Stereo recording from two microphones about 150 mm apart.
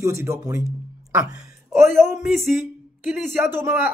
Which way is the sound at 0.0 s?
20° right (ahead or behind).